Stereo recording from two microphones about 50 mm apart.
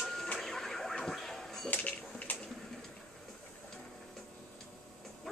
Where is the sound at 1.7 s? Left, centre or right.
Left.